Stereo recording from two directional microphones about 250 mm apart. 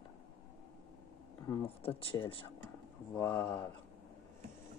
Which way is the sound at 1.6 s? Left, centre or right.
Left.